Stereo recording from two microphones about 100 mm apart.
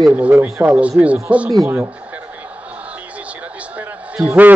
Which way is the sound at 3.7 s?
15° right (ahead or behind).